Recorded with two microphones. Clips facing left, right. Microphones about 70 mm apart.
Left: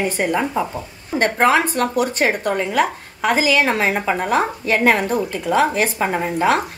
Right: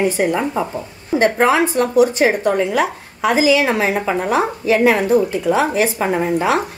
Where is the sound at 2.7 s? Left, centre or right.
Left.